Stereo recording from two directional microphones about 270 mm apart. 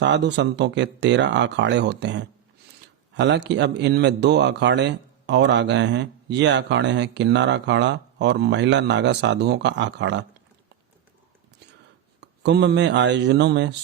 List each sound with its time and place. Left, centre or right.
0.0 s a man's voice: right
12.2 s a man's voice: right